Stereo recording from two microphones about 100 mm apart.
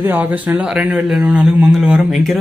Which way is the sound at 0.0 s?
20° right (ahead or behind).